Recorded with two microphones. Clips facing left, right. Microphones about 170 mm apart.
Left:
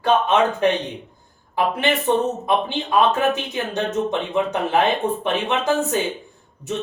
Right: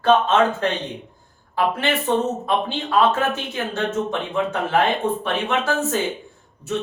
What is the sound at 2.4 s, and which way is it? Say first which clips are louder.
Speech: left 1 dB; 20° left (ahead or behind).